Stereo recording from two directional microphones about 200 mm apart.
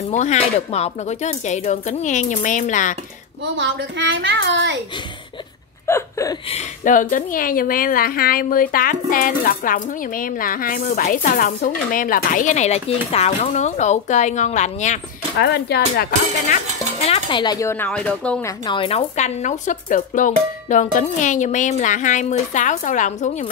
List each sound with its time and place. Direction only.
0.1 s speech: 35° left (ahead or behind)
3.4 s a child's voice: 65° right (ahead or behind)
5.9 s whimper: 15° left (ahead or behind)
6.5 s a woman's voice: 40° left (ahead or behind)
15.3 s speech: 55° left (ahead or behind)
16.4 s speech: 35° left (ahead or behind); by 18.4 s 5° left (ahead or behind)
18.7 s speech: 25° left (ahead or behind)